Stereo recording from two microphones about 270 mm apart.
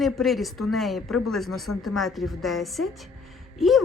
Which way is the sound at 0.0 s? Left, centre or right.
Centre.